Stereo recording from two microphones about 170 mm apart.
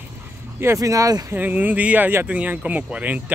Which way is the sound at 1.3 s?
10° right (ahead or behind).